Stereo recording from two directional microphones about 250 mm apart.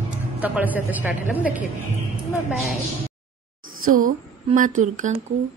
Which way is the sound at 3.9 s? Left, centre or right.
Right.